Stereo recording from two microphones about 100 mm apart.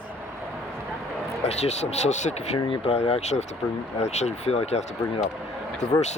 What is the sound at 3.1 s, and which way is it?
Speech, 85° left.